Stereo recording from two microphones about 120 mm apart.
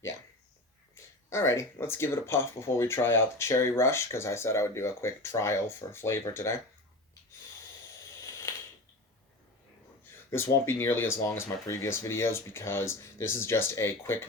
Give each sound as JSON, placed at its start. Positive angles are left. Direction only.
{"t": 1.3, "sound": "speech", "side_deg": 25}
{"t": 8.5, "sound": "mechanisms", "side_deg": 25}
{"t": 10.3, "sound": "speech", "side_deg": 20}